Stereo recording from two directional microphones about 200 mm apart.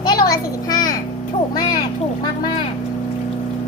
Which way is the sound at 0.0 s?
20° left (ahead or behind).